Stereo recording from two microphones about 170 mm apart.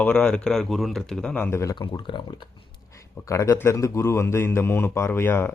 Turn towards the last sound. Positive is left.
turn(degrees=15)  # may be behind; listen again after turning